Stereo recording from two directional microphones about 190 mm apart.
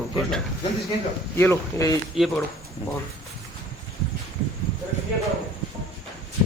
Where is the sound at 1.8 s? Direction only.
15° left (ahead or behind).